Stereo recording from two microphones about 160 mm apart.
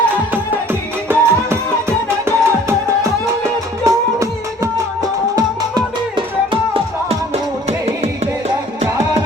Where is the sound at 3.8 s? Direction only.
20° right (ahead or behind); by 8.1 s 45° right (ahead or behind).